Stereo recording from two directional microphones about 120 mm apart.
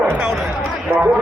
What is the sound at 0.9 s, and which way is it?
Music, 15° right (ahead or behind).